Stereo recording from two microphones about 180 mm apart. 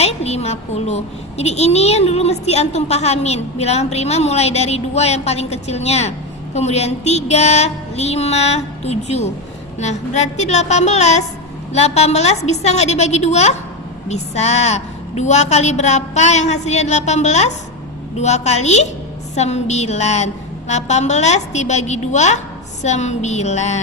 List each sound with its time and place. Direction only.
0.0 s a child's voice: 35° left (ahead or behind)